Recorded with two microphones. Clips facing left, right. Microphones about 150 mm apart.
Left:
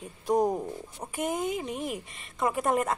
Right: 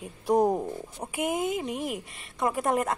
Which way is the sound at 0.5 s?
15° right (ahead or behind).